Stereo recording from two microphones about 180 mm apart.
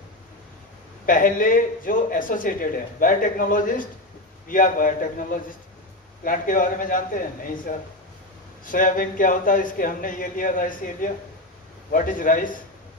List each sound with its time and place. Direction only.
1.0 s speech: 50° left (ahead or behind)